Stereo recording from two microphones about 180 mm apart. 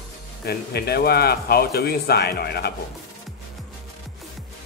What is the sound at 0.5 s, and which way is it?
A man's voice, 65° left (ahead or behind).